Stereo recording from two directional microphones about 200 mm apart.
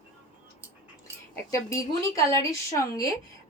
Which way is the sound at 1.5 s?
15° left (ahead or behind).